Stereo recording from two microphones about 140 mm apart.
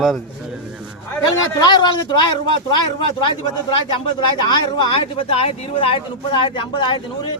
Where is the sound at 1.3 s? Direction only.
30° left (ahead or behind).